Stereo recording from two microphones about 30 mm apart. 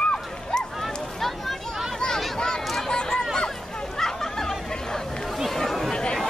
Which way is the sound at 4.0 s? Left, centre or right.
Centre.